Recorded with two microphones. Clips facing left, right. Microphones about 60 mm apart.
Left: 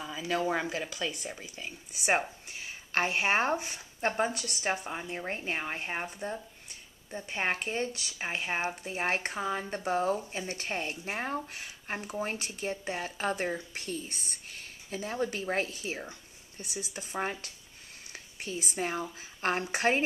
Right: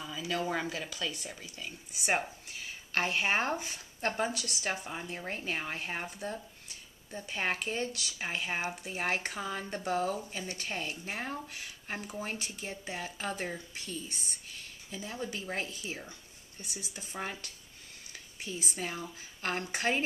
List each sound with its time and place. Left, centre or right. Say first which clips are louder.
0.0 s speech: left 3 dB; left; by 7.3 s centre
7.3 s speech: left 2 dB; centre
9.0 s speech: left 3 dB; left
16.7 s speech: left 6 dB; left